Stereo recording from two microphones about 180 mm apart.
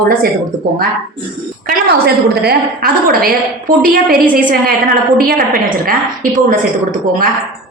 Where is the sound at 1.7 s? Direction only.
60° right (ahead or behind).